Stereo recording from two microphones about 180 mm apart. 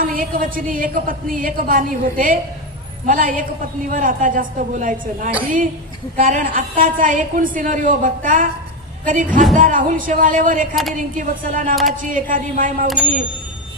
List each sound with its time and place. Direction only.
0.0 s a woman's voice: 50° right (ahead or behind)
11.7 s speech: centre (ahead or behind)
12.1 s a woman's voice: 50° right (ahead or behind)